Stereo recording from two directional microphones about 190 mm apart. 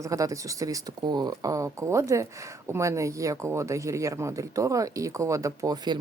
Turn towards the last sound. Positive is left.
turn(degrees=-20)  # may be behind; listen again after turning